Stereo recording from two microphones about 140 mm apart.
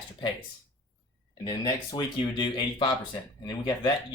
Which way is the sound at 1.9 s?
35° left (ahead or behind).